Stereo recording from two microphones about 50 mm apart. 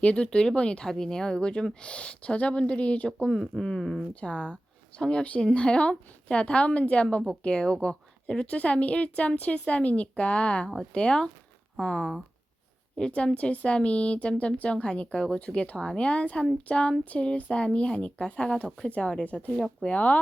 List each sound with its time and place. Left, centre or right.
0.0 s a woman's voice: left
0.3 s speech: centre
0.9 s a woman's voice: centre; by 3.1 s left
3.2 s speech: centre
4.1 s a woman's voice: left